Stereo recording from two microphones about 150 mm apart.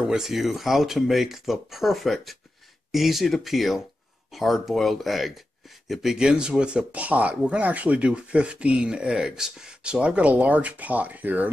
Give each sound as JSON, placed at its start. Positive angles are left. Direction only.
{"t": 0.0, "sound": "speech", "side_deg": -5}